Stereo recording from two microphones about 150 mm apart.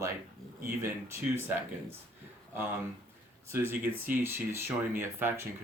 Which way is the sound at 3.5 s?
15° right (ahead or behind).